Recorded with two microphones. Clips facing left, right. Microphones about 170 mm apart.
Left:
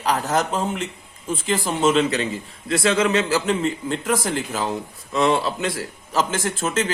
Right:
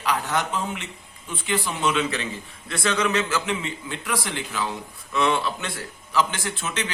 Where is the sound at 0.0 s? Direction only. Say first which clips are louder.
Left 4 dB; 40° left (ahead or behind).